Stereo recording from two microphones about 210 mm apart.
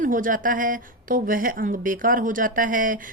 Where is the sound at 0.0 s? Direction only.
40° right (ahead or behind).